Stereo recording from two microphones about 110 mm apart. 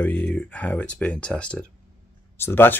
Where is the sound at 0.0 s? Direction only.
15° left (ahead or behind).